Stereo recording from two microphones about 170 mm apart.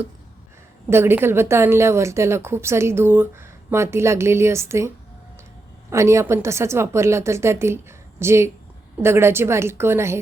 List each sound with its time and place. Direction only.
0.9 s a woman's voice: 15° right (ahead or behind)
5.9 s a woman's voice: 15° right (ahead or behind)